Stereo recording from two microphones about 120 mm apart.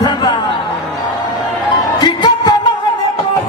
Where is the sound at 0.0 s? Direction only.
35° left (ahead or behind).